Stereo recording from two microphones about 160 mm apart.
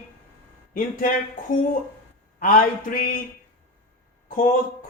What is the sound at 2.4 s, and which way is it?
Speech, 60° left (ahead or behind).